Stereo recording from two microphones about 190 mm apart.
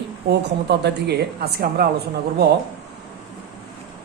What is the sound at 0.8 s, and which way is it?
A man's voice, 60° right (ahead or behind).